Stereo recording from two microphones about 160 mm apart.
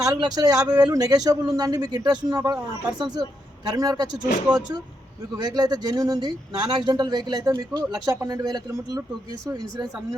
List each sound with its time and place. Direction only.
0.0 s speech: 25° right (ahead or behind)
3.7 s speech: 25° right (ahead or behind)
5.4 s speech: 25° right (ahead or behind)